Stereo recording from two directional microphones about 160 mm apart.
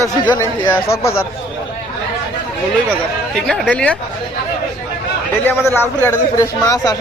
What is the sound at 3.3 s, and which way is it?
Speech, 5° left (ahead or behind).